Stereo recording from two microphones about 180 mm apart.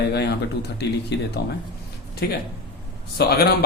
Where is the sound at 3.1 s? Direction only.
60° left (ahead or behind).